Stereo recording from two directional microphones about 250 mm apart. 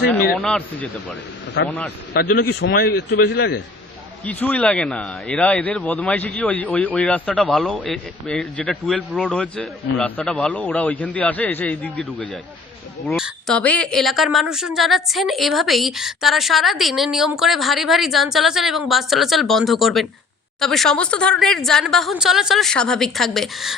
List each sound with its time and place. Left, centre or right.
0.3 s speech: centre
1.6 s a man's voice: left
4.3 s speech: centre